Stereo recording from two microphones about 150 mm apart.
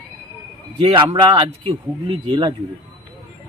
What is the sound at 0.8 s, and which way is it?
Speech, 40° right (ahead or behind).